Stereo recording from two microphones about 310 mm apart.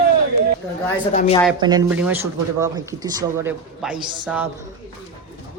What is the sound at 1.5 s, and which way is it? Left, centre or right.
Speech, centre.